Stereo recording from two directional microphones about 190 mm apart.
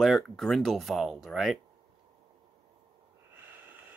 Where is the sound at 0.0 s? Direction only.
Centre (ahead or behind).